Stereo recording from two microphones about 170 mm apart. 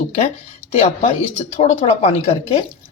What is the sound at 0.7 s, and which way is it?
Speech, 40° left (ahead or behind).